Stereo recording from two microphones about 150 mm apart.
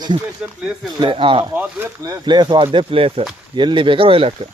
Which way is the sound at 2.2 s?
30° right (ahead or behind).